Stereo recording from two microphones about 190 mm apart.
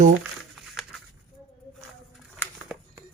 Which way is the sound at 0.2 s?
Centre (ahead or behind).